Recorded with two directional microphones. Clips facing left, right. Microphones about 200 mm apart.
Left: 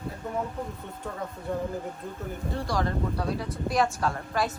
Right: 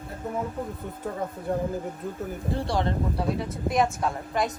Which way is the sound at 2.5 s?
30° right (ahead or behind).